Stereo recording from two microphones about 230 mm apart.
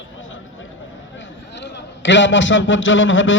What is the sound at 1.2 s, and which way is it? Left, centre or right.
A man's voice, left.